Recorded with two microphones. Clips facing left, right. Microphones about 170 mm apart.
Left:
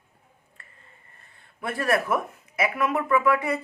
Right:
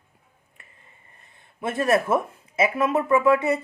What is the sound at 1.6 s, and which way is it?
Speech, 20° right (ahead or behind).